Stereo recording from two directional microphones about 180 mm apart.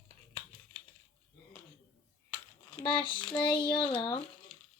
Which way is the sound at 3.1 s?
5° left (ahead or behind).